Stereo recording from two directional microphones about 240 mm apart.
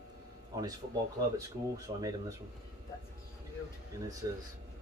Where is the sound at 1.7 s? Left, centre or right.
Centre.